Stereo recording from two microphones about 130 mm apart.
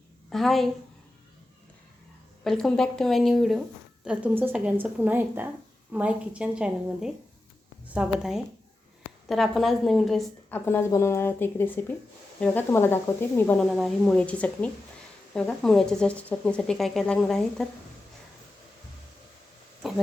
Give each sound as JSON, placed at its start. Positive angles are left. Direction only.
{"t": 0.3, "sound": "speech", "side_deg": 0}
{"t": 2.4, "sound": "a woman's voice", "side_deg": 5}
{"t": 10.5, "sound": "speech", "side_deg": 15}
{"t": 13.6, "sound": "speech", "side_deg": 0}
{"t": 19.8, "sound": "a sound", "side_deg": 0}